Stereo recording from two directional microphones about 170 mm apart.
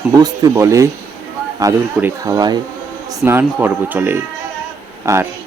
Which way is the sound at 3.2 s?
15° right (ahead or behind).